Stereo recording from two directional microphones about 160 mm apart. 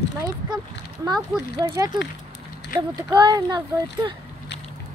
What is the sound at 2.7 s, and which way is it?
Speech, 60° left (ahead or behind).